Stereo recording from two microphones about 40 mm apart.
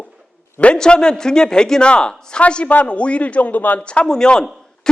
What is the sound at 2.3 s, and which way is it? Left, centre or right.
A man's voice, left.